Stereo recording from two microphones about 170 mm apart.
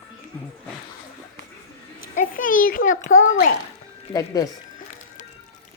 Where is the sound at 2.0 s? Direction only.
55° left (ahead or behind).